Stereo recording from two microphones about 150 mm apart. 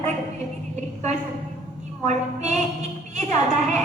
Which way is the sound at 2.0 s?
50° right (ahead or behind).